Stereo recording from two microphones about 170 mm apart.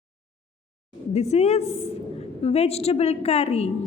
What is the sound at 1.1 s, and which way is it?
A woman's voice, 40° left (ahead or behind).